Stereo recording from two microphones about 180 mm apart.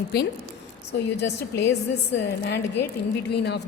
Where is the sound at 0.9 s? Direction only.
70° left (ahead or behind).